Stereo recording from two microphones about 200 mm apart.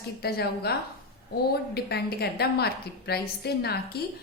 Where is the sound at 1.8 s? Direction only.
55° left (ahead or behind).